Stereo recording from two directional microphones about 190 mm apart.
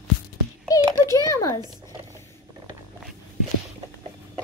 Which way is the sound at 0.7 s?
20° left (ahead or behind).